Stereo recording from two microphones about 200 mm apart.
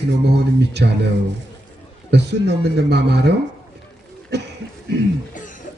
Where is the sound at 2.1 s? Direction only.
60° right (ahead or behind).